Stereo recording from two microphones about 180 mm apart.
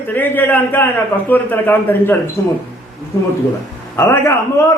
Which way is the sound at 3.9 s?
15° left (ahead or behind).